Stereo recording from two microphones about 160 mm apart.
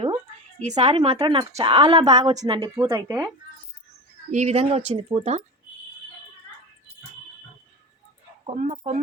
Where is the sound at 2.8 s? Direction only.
20° right (ahead or behind).